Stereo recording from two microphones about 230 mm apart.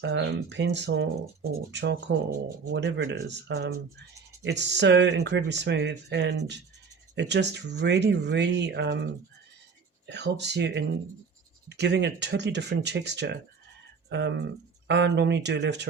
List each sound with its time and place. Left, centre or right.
0.0 s speech: right
10.1 s speech: right